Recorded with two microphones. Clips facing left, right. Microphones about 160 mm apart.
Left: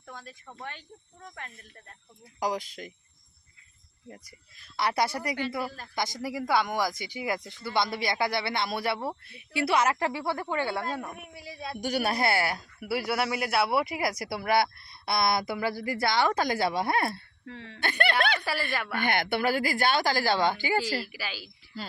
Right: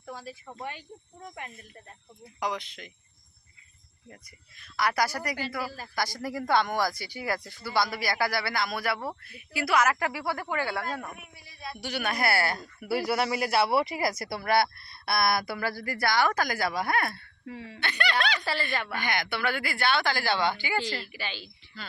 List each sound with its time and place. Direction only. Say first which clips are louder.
0.0 s a sound: right 5 dB; 5° right (ahead or behind)
0.4 s speech: right 2 dB; 10° right (ahead or behind)
2.4 s speech: left 2 dB; 40° left (ahead or behind)
4.6 s speech: even; 30° left (ahead or behind)
5.6 s speech: even; 5° right (ahead or behind)
5.9 s speech: right 1 dB; 20° left (ahead or behind)
11.8 s speech: left 3 dB; 40° left (ahead or behind)
17.4 s speech: right 4 dB; 10° right (ahead or behind)
17.7 s speech: left 3 dB; 50° left (ahead or behind)
18.7 s speech: even; 5° left (ahead or behind)
18.9 s a woman's voice: left 7 dB; 55° left (ahead or behind)
19.5 s speech: left 1 dB; 40° left (ahead or behind)
21.0 s speech: left 1 dB; 5° left (ahead or behind)